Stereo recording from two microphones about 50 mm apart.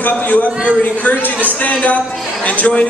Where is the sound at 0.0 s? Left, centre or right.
Left.